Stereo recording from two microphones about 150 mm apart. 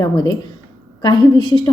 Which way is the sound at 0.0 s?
25° left (ahead or behind).